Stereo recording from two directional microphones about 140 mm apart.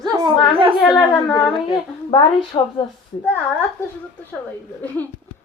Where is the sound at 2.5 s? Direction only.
35° left (ahead or behind).